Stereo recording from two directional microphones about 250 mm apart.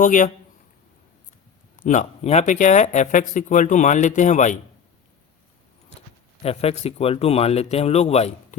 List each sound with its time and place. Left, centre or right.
0.0 s speech: left
1.7 s speech: left
6.4 s speech: left